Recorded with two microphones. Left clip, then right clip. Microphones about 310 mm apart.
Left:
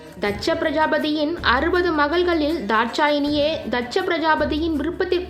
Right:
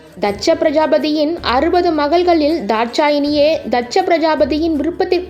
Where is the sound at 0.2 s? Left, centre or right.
Centre.